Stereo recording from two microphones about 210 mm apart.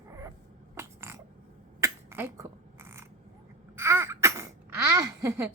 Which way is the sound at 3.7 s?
10° right (ahead or behind).